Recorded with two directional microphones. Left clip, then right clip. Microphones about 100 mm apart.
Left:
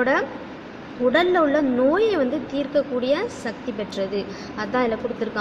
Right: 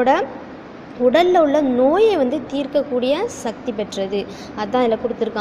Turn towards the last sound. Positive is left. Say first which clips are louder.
# right 5 dB
turn(degrees=-30)  # may be behind; listen again after turning